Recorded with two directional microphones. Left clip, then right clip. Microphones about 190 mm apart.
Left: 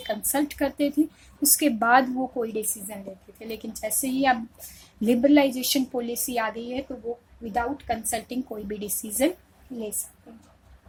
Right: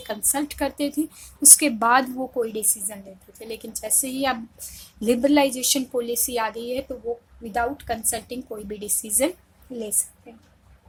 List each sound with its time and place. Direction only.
0.0 s speech: 10° right (ahead or behind)